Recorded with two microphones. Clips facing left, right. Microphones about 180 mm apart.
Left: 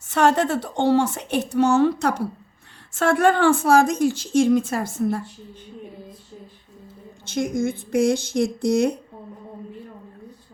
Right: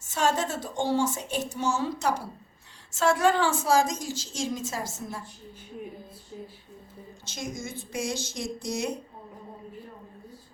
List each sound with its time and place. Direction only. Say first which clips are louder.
0.1 s a woman's voice: left 8 dB; 65° left (ahead or behind)
7.3 s a woman's voice: left 13 dB; 55° left (ahead or behind)